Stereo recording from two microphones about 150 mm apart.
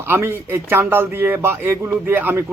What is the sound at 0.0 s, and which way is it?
A man's voice, 15° right (ahead or behind).